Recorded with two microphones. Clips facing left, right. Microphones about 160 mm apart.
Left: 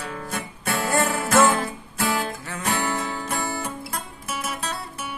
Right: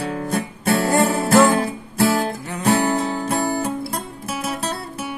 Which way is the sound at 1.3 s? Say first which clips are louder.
Right 3 dB; 35° right (ahead or behind).